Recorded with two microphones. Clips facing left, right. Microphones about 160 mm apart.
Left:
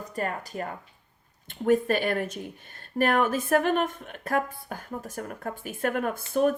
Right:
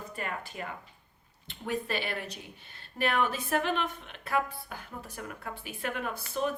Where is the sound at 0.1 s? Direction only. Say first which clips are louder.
Left 9 dB; 40° left (ahead or behind).